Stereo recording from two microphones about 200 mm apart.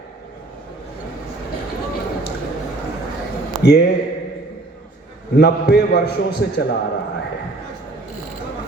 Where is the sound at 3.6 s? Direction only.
55° left (ahead or behind).